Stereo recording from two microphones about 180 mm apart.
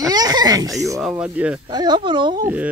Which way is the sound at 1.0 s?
5° right (ahead or behind).